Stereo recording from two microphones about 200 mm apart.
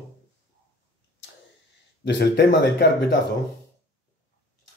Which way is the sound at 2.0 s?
55° left (ahead or behind).